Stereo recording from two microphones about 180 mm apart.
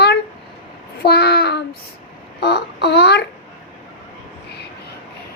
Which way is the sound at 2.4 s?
70° left (ahead or behind).